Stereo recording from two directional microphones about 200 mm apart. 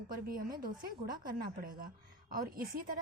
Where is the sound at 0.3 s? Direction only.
45° right (ahead or behind).